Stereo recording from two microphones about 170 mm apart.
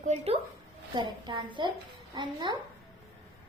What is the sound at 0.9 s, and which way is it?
A woman's voice, 25° right (ahead or behind).